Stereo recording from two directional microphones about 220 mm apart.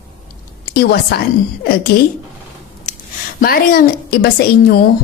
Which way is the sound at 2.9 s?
35° left (ahead or behind).